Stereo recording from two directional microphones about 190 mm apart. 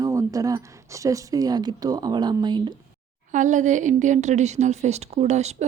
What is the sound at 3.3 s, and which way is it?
Speech, 40° right (ahead or behind).